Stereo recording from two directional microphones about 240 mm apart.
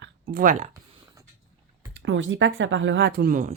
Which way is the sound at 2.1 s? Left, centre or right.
Right.